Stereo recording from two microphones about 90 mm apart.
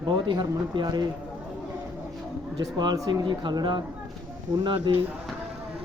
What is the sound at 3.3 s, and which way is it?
Speech, 60° right (ahead or behind).